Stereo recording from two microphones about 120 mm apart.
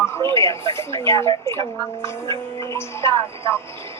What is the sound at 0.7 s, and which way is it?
Music, 20° left (ahead or behind).